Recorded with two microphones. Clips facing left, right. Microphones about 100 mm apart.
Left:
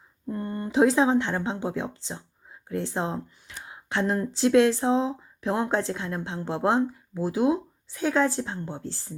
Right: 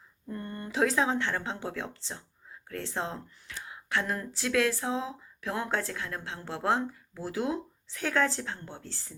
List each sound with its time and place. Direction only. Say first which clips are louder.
0.3 s speech: left 7 dB; 20° left (ahead or behind)